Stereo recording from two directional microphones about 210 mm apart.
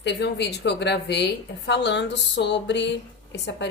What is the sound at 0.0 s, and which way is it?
A woman's voice, 55° left (ahead or behind).